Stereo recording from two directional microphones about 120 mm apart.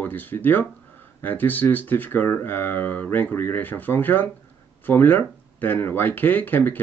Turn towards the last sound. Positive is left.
turn(degrees=15)  # may be behind; listen again after turning